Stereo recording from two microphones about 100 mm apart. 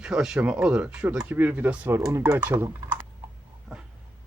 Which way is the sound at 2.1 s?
30° right (ahead or behind).